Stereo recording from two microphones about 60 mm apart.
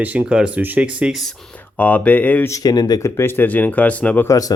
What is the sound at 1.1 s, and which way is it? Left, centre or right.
Speech, centre.